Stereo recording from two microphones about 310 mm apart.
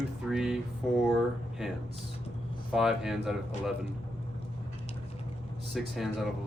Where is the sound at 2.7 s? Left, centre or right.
Centre.